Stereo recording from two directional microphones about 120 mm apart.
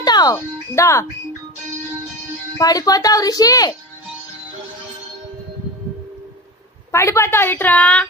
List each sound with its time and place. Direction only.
0.0 s speech: 35° left (ahead or behind)
2.6 s a woman's voice: 30° left (ahead or behind)
6.9 s a woman's voice: 20° left (ahead or behind)